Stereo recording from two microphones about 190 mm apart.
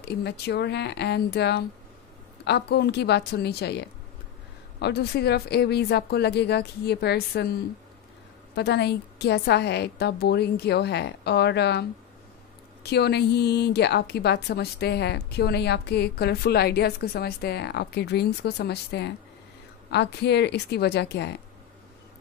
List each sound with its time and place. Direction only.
0.0 s a woman's voice: 60° left (ahead or behind)
8.5 s a woman's voice: 60° left (ahead or behind)
12.8 s a woman's voice: 60° left (ahead or behind)